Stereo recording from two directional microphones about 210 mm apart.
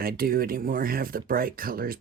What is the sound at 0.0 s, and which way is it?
Speech, 45° right (ahead or behind).